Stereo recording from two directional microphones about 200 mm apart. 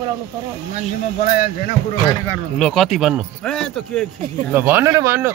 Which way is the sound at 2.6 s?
Centre (ahead or behind).